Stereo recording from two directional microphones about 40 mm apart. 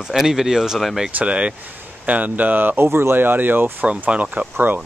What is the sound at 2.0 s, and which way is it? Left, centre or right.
Speech, right.